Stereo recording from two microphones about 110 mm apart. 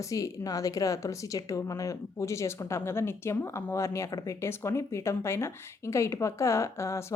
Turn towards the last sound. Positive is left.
turn(degrees=25)  # may be behind; listen again after turning